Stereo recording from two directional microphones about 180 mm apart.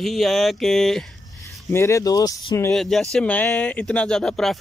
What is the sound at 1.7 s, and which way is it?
Speech, 15° left (ahead or behind).